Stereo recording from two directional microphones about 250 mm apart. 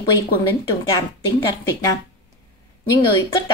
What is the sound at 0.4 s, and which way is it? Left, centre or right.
Speech, centre.